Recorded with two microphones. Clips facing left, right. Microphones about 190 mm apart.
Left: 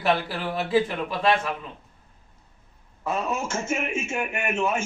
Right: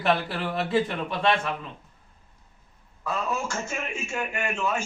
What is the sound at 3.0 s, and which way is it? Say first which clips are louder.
A man's voice: left 2 dB; 20° left (ahead or behind).